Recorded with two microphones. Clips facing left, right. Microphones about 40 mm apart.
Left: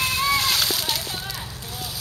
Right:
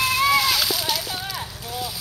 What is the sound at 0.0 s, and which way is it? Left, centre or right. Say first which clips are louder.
Slosh: right 3 dB; centre.